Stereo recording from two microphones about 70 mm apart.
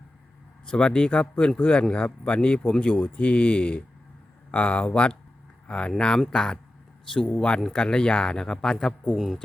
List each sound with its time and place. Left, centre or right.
0.6 s speech: centre